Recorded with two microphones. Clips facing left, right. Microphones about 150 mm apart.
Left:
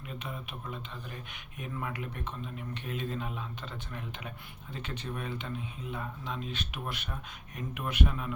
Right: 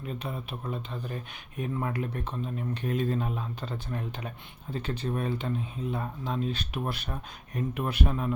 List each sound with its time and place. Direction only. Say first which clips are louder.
0.3 s speech: right 4 dB; 35° right (ahead or behind)